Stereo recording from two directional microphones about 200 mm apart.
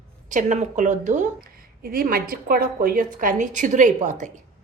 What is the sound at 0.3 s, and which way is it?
A woman's voice, 40° right (ahead or behind).